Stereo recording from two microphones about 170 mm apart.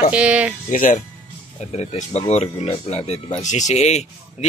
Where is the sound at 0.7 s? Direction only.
50° left (ahead or behind).